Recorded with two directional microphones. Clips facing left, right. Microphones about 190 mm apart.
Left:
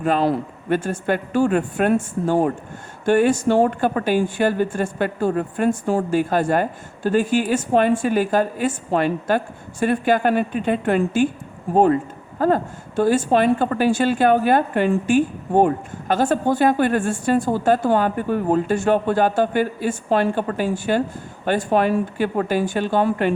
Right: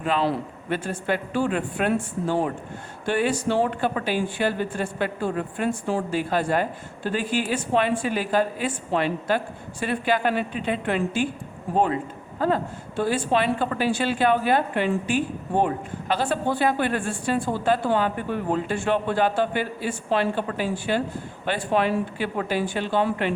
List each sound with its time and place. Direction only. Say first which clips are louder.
0.0 s a woman's voice: left 5 dB; 45° left (ahead or behind)